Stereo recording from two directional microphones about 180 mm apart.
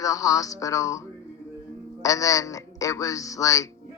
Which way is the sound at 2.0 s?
20° left (ahead or behind).